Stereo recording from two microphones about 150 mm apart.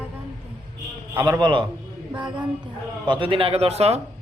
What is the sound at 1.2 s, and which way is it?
Speech, 30° right (ahead or behind).